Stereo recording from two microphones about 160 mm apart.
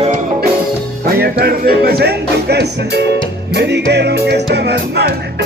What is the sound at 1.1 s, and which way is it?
Music, 80° right.